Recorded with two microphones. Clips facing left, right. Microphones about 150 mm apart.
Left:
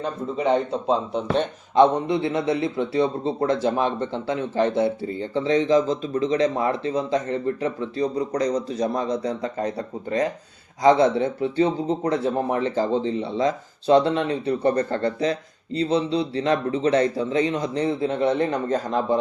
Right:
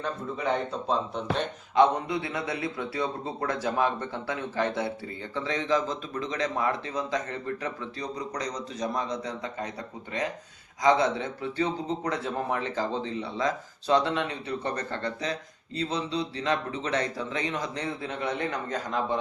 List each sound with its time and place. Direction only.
0.0 s a man's voice: 25° left (ahead or behind)